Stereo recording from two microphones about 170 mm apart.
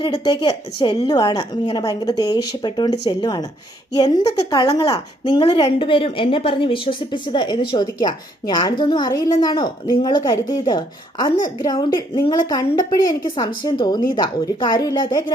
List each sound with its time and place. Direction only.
0.0 s a woman's voice: 25° left (ahead or behind)